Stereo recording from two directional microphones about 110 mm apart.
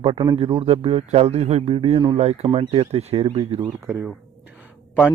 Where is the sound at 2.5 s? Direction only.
65° right (ahead or behind).